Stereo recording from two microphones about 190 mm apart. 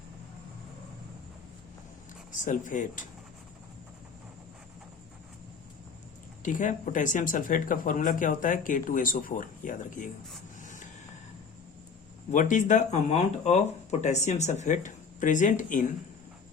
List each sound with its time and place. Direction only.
2.3 s speech: 45° left (ahead or behind)
6.4 s speech: 45° left (ahead or behind)
10.6 s a sound: 40° left (ahead or behind)
12.3 s speech: 40° left (ahead or behind)